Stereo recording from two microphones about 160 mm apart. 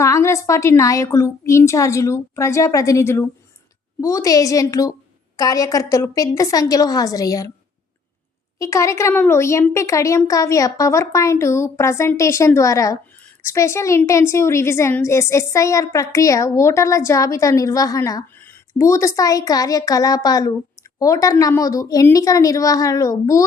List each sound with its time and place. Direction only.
0.0 s a woman's voice: 20° left (ahead or behind)
8.5 s a woman's voice: 20° left (ahead or behind)